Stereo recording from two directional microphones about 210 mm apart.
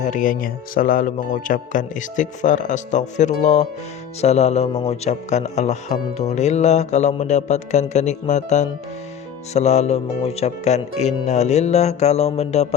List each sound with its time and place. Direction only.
0.0 s speech: 40° left (ahead or behind)